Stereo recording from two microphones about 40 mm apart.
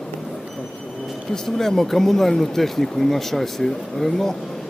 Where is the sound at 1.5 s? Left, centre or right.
Centre.